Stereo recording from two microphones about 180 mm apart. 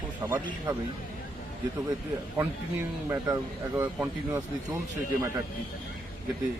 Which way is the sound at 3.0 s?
15° right (ahead or behind).